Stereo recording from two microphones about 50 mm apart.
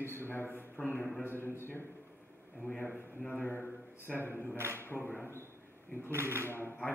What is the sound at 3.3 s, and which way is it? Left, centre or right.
Speech, left.